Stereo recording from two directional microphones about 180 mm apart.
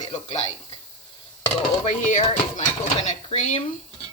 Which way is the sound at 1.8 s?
40° left (ahead or behind).